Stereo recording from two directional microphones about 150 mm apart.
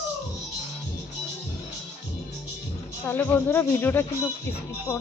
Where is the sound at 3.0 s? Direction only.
15° left (ahead or behind).